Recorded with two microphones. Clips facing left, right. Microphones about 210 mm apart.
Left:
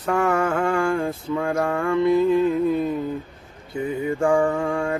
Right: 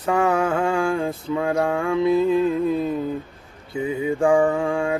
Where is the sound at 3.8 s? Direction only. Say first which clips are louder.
Right 1 dB; 15° right (ahead or behind).